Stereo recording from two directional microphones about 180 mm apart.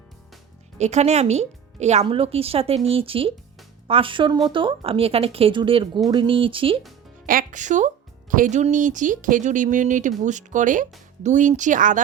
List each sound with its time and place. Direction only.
0.8 s speech: 40° right (ahead or behind)
7.3 s speech: 45° right (ahead or behind)